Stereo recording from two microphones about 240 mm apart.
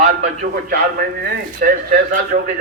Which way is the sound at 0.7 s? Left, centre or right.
Right.